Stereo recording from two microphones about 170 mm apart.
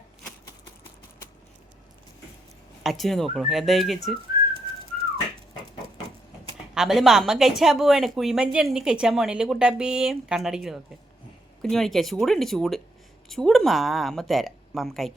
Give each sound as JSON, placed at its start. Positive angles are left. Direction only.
{"t": 2.8, "sound": "a woman's voice", "side_deg": 0}
{"t": 6.7, "sound": "a woman's voice", "side_deg": 0}